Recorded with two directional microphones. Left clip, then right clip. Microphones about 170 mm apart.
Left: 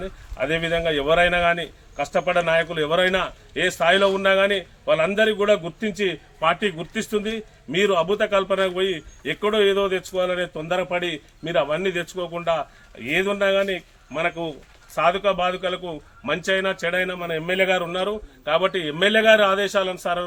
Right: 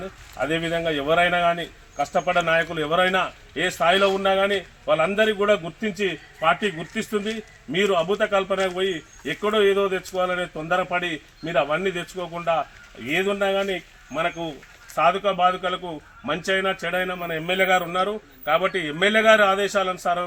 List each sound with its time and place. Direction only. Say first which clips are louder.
0.3 s a man's voice: left 2 dB; centre (ahead or behind)
16.4 s speech: even; 40° left (ahead or behind)
17.1 s a man's voice: left 1 dB; 5° left (ahead or behind)